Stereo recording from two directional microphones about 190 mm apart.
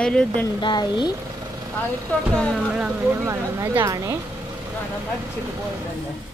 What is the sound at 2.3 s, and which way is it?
Speech, 5° left (ahead or behind).